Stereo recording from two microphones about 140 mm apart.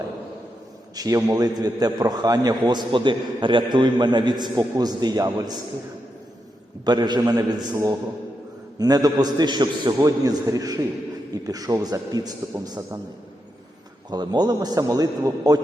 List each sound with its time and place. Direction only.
0.9 s a man's voice: 25° right (ahead or behind)
6.8 s a man's voice: 30° right (ahead or behind)
14.1 s a man's voice: 30° right (ahead or behind)